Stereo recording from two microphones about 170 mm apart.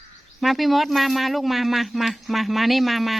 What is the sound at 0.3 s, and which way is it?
Speech, centre (ahead or behind).